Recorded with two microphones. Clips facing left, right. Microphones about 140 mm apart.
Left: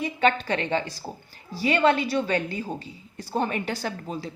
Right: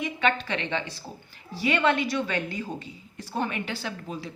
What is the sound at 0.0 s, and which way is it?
A woman's voice, 40° left (ahead or behind).